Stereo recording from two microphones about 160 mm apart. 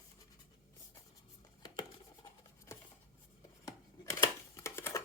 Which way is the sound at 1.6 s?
25° left (ahead or behind).